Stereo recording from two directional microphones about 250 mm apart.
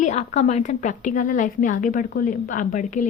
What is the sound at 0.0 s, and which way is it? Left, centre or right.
A woman's voice, left.